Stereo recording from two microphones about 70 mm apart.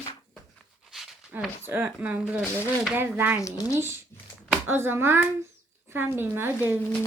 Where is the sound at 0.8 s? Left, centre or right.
Centre.